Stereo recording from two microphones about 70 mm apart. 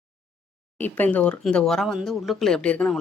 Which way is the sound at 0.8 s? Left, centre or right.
Left.